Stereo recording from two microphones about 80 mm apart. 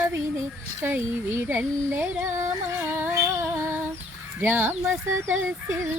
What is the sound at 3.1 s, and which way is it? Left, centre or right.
Music, right.